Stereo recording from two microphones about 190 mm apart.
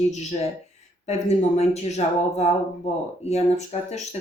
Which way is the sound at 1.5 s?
35° left (ahead or behind).